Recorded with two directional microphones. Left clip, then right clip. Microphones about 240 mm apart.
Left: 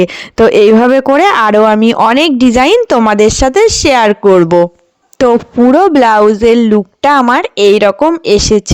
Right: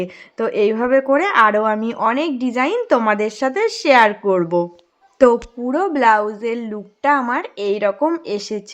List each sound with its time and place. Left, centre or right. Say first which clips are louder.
0.0 s speech: left 14 dB; left